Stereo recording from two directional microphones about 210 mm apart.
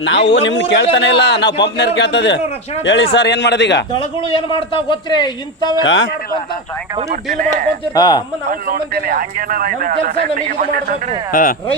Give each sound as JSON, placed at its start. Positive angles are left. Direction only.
{"t": 0.0, "sound": "a man's voice", "side_deg": 60}
{"t": 4.2, "sound": "a man's voice", "side_deg": 25}
{"t": 5.8, "sound": "a man's voice", "side_deg": 65}
{"t": 7.1, "sound": "speech", "side_deg": -40}
{"t": 7.9, "sound": "speech", "side_deg": 20}
{"t": 8.4, "sound": "speech", "side_deg": -45}
{"t": 11.3, "sound": "speech", "side_deg": 40}